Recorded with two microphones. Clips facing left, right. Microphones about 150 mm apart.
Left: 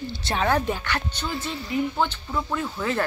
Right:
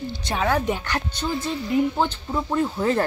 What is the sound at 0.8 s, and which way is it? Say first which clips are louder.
Speech: right 2 dB; 40° right (ahead or behind).